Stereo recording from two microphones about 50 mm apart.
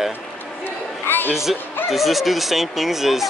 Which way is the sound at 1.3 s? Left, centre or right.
Centre.